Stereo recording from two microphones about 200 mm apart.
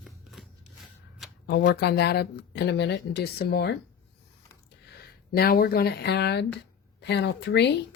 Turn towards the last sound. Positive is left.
turn(degrees=60)  # may be behind; listen again after turning